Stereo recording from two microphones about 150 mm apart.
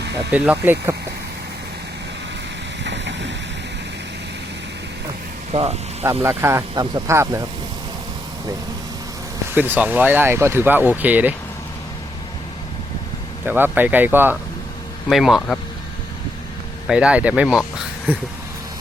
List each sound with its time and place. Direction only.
0.3 s speech: 10° right (ahead or behind)
5.5 s speech: 40° right (ahead or behind)
6.2 s speech: 20° right (ahead or behind)
9.6 s speech: 10° right (ahead or behind)
13.4 s speech: 15° right (ahead or behind)
15.1 s speech: centre (ahead or behind)
16.8 s speech: 5° right (ahead or behind)